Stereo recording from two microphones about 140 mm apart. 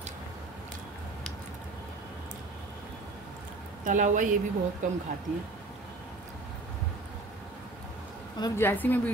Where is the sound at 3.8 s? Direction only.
65° right (ahead or behind).